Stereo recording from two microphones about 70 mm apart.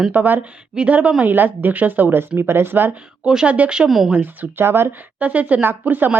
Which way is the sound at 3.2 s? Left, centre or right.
Centre.